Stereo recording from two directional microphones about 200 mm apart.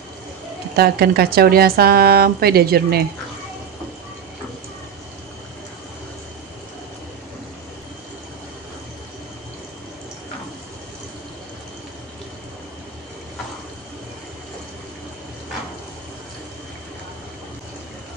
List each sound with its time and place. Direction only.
0.7 s speech: 50° right (ahead or behind)